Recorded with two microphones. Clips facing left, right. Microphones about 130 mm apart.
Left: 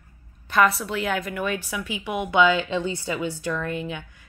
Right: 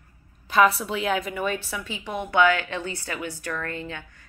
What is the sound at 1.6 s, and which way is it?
A woman's voice, 10° left (ahead or behind).